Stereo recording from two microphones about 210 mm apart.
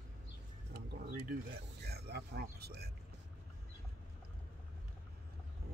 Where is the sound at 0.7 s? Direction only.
50° right (ahead or behind).